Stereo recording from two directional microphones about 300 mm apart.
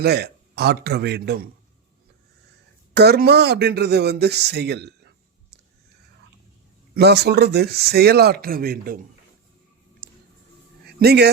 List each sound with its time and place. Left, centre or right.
0.0 s speech: right
2.9 s speech: right
6.9 s speech: right
10.0 s a sound: right